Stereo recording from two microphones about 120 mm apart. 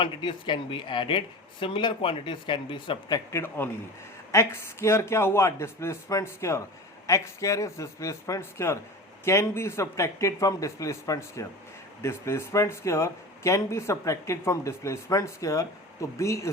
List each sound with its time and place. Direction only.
0.0 s speech: 40° left (ahead or behind)
3.3 s a man's voice: 15° left (ahead or behind)